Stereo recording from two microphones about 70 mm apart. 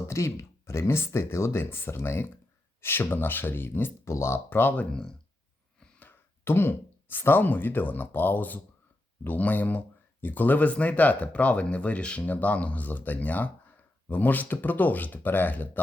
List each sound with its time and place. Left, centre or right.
0.1 s speech: left; by 5.1 s centre
6.1 s speech: left